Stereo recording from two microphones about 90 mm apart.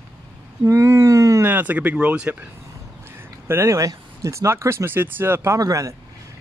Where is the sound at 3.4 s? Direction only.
30° right (ahead or behind).